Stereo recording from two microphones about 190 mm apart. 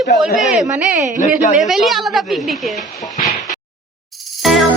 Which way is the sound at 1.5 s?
Centre (ahead or behind).